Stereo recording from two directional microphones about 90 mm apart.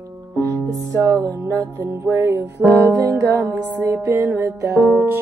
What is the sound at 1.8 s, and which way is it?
Music, 25° right (ahead or behind).